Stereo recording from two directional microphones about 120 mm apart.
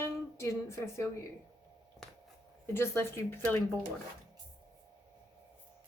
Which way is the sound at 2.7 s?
20° left (ahead or behind).